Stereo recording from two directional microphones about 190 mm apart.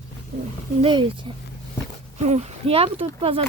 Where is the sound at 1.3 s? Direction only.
25° right (ahead or behind).